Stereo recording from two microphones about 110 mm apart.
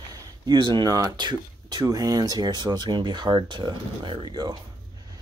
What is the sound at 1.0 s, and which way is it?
Speech, 40° right (ahead or behind).